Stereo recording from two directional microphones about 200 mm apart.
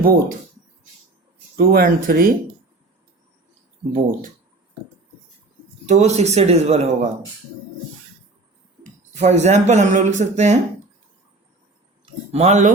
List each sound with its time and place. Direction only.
0.0 s speech: 45° right (ahead or behind)
1.5 s speech: 50° right (ahead or behind)
5.8 s speech: 35° right (ahead or behind)
9.2 s speech: 35° right (ahead or behind)
12.3 s speech: 35° right (ahead or behind)